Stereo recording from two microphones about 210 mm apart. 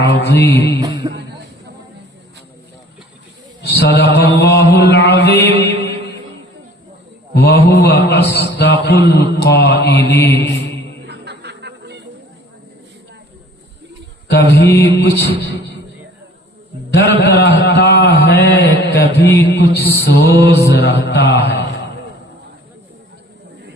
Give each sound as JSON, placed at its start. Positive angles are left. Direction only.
{"t": 0.0, "sound": "mantra", "side_deg": 50}
{"t": 0.8, "sound": "music", "side_deg": -20}
{"t": 3.8, "sound": "mantra", "side_deg": 50}
{"t": 4.3, "sound": "a man's voice", "side_deg": 55}
{"t": 7.3, "sound": "a man's voice", "side_deg": 50}
{"t": 11.0, "sound": "music", "side_deg": -55}
{"t": 14.3, "sound": "mantra", "side_deg": 50}
{"t": 14.8, "sound": "a man's voice", "side_deg": 55}
{"t": 16.9, "sound": "a sound", "side_deg": 50}
{"t": 19.5, "sound": "a man's voice", "side_deg": 55}